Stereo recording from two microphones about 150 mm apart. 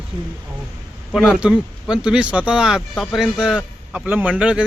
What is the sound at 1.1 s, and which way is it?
A man's voice, 5° right (ahead or behind).